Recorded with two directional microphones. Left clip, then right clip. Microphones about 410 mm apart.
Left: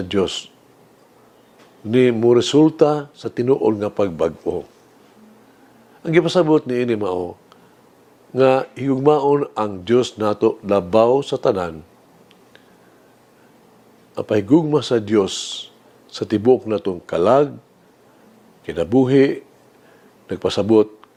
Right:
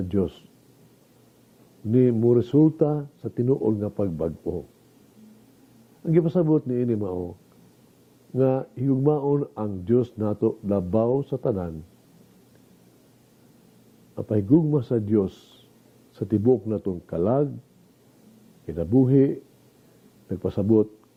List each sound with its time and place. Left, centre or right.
0.0 s speech: centre
1.9 s speech: centre
6.0 s speech: centre
7.1 s speech: centre
8.4 s speech: centre
14.2 s speech: centre
18.6 s speech: centre